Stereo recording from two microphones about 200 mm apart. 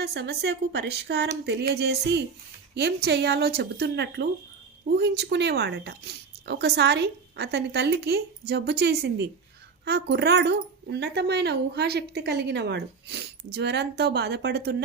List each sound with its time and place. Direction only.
0.0 s speech: 55° right (ahead or behind)